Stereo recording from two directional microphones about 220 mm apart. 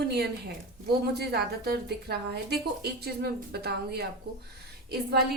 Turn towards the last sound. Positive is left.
turn(degrees=-45)  # may be behind; listen again after turning